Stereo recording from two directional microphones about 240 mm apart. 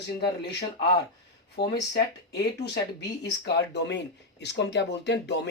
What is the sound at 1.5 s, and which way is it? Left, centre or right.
Speech, left.